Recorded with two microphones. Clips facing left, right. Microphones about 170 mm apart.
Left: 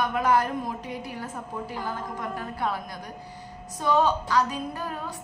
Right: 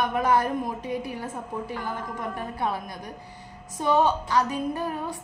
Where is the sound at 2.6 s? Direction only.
20° right (ahead or behind).